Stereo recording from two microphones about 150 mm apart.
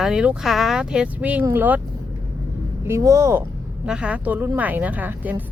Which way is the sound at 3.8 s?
5° right (ahead or behind).